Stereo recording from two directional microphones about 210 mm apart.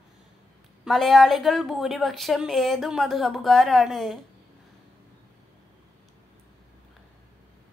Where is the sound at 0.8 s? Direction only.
Centre (ahead or behind).